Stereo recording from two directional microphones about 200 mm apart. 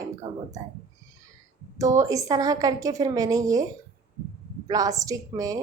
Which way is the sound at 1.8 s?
15° right (ahead or behind).